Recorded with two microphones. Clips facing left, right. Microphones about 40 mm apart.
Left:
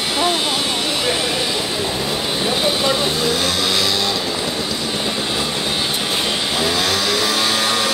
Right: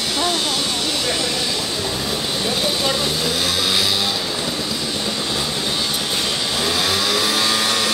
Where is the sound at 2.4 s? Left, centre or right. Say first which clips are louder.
Left 3 dB; centre.